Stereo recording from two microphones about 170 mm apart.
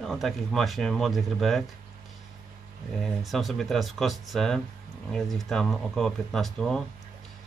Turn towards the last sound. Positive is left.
turn(degrees=0)  # may be behind; listen again after turning